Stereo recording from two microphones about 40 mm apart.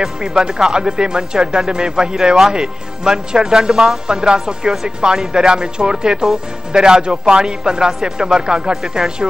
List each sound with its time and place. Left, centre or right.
0.0 s speech: centre